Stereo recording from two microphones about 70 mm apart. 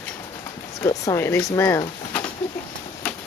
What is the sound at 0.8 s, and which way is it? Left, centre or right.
Speech, left.